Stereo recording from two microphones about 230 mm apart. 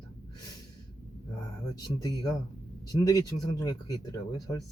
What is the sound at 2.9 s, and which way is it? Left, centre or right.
Speech, centre.